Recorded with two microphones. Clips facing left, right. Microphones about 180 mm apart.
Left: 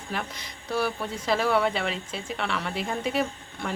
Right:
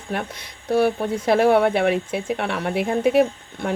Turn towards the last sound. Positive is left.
turn(degrees=-60)  # may be behind; listen again after turning